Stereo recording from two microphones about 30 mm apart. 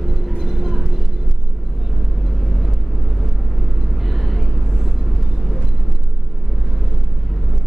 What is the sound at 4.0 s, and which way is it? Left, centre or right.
Vehicle, centre.